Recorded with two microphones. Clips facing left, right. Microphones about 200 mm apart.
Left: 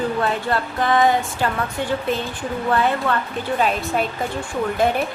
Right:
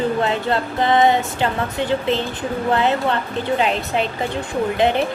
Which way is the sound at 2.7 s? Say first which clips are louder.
Right 1 dB; 25° right (ahead or behind).